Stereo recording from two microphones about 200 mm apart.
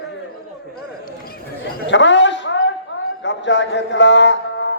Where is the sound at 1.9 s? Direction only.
65° left (ahead or behind).